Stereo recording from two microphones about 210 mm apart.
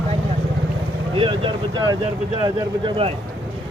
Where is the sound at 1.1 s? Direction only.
25° right (ahead or behind).